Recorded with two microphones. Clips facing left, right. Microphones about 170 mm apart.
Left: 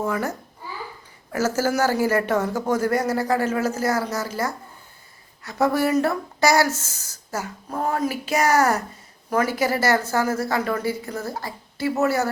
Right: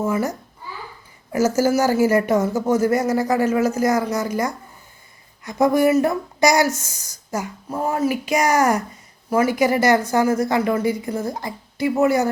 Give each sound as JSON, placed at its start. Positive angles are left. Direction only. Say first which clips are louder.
{"t": 0.0, "sound": "speech", "louder": "right 3 dB", "side_deg": -10}